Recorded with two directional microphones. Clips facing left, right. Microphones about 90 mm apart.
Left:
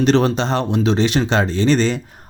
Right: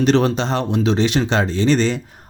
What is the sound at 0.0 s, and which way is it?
Speech, 35° left (ahead or behind).